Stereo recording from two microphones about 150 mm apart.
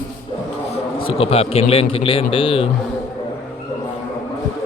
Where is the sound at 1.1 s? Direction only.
40° left (ahead or behind).